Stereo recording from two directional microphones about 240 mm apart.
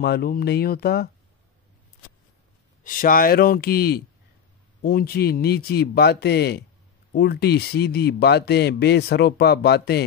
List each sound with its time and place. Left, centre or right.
0.0 s speech: left
2.8 s speech: left